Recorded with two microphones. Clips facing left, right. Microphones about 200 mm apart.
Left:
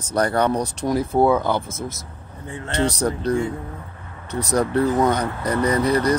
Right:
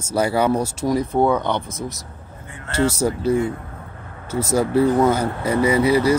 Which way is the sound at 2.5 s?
30° left (ahead or behind).